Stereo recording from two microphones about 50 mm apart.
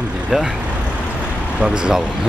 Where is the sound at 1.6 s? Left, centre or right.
Centre.